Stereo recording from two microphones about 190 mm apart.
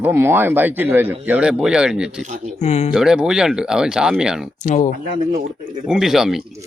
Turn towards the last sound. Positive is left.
turn(degrees=0)  # may be behind; listen again after turning